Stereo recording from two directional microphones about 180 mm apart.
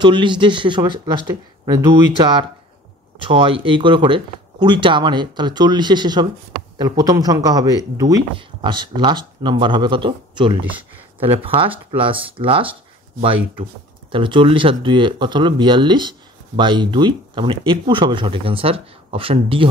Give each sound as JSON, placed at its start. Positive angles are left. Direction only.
{"t": 0.0, "sound": "speech", "side_deg": -25}
{"t": 3.2, "sound": "speech", "side_deg": -30}